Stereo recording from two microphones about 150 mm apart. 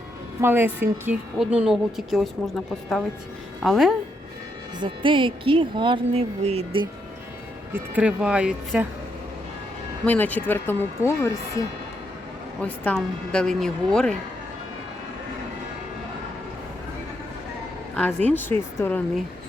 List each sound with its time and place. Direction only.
0.4 s a woman's voice: 15° right (ahead or behind)
3.6 s a woman's voice: centre (ahead or behind)
4.8 s speech: 35° right (ahead or behind)
7.7 s speech: 10° right (ahead or behind)
10.1 s speech: 10° left (ahead or behind)
12.6 s a woman's voice: 10° left (ahead or behind)
17.9 s speech: 10° left (ahead or behind)